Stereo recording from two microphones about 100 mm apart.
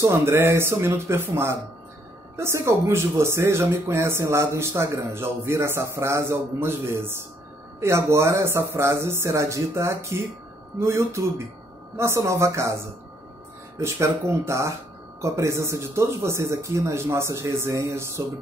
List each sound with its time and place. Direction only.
0.0 s speech: 25° right (ahead or behind)
13.8 s speech: 30° right (ahead or behind)